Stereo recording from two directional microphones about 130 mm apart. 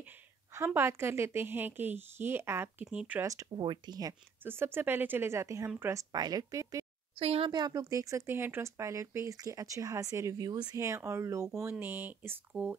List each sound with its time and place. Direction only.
0.7 s a woman's voice: 20° right (ahead or behind)
3.2 s speech: 25° right (ahead or behind)
3.5 s speech: 35° right (ahead or behind)
4.5 s a woman's voice: 15° right (ahead or behind)
7.2 s speech: 45° right (ahead or behind)
7.5 s a woman's voice: 30° right (ahead or behind); by 12.7 s 10° right (ahead or behind)